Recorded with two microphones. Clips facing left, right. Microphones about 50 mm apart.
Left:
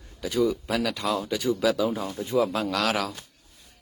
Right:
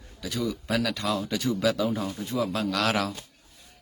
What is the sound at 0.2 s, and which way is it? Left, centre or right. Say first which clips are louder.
Speech: left 6 dB; left.